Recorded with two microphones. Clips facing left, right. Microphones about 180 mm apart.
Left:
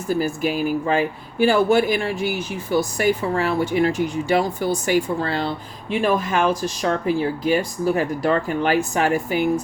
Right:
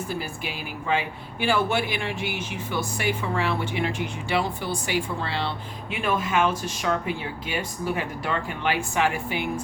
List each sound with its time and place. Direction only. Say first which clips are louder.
0.1 s speech: left 10 dB; 45° left (ahead or behind)